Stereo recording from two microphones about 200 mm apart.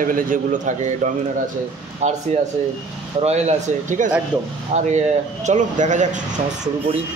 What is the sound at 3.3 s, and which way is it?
Speech, 35° right (ahead or behind).